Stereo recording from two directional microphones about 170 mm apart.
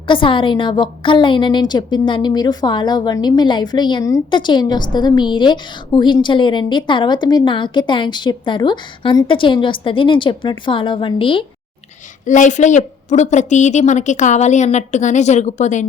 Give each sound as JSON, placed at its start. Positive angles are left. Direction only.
{"t": 0.1, "sound": "a woman's voice", "side_deg": 30}
{"t": 12.2, "sound": "a woman's voice", "side_deg": 45}